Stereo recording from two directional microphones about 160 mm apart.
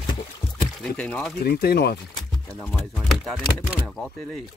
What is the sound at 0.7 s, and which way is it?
Speech, 5° left (ahead or behind).